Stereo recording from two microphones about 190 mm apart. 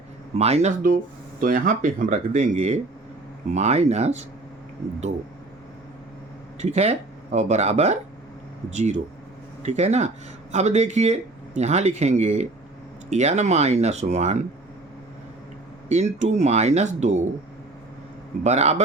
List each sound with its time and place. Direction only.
0.3 s speech: 35° right (ahead or behind)
6.6 s speech: 35° right (ahead or behind)
15.9 s speech: 40° right (ahead or behind)
18.4 s speech: 35° right (ahead or behind)